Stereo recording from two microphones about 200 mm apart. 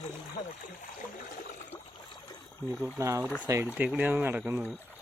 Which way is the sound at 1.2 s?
45° left (ahead or behind).